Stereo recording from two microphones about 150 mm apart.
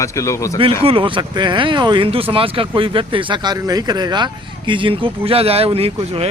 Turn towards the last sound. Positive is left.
turn(degrees=-40)  # may be behind; listen again after turning